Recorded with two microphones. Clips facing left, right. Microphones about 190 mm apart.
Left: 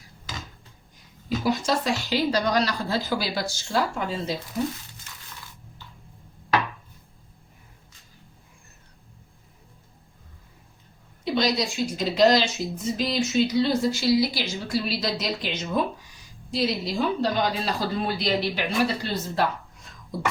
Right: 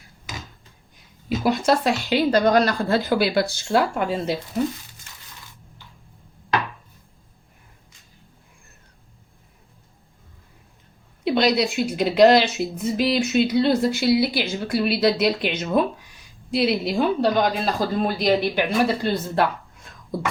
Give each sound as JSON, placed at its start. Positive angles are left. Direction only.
{"t": 1.5, "sound": "a woman's voice", "side_deg": -60}
{"t": 11.3, "sound": "a woman's voice", "side_deg": -60}
{"t": 19.0, "sound": "a sound", "side_deg": -55}